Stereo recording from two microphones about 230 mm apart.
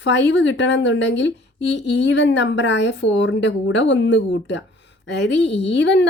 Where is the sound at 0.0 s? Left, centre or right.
Left.